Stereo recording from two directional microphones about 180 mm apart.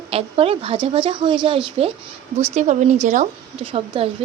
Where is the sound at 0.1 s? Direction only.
35° right (ahead or behind).